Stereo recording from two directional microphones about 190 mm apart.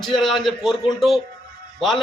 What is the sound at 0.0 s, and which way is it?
A man's voice, centre (ahead or behind).